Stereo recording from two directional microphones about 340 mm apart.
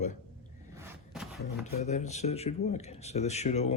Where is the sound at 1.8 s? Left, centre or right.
Centre.